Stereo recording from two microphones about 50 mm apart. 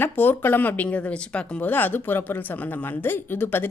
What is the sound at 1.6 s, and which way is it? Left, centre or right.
Speech, left.